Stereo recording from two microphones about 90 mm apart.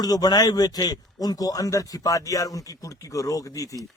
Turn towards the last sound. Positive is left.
turn(degrees=40)  # may be behind; listen again after turning